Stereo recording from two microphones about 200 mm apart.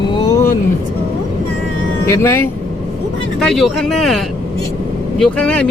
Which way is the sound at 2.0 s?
15° left (ahead or behind).